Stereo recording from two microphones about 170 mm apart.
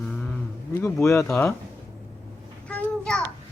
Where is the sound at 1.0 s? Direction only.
15° left (ahead or behind).